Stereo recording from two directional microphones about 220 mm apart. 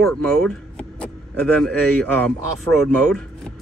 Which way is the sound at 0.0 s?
5° left (ahead or behind).